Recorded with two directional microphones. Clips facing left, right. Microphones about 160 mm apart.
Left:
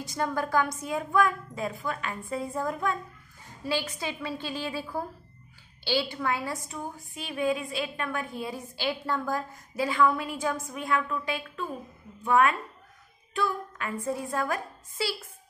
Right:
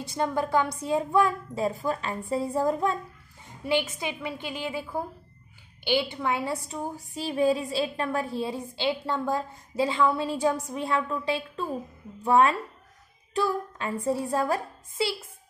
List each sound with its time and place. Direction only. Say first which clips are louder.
0.0 s a woman's voice: right 2 dB; 25° right (ahead or behind)
5.9 s a woman's voice: right 2 dB; 20° right (ahead or behind)
13.3 s child singing: right 3 dB; 35° right (ahead or behind)
14.3 s a woman's voice: right 4 dB; 30° right (ahead or behind)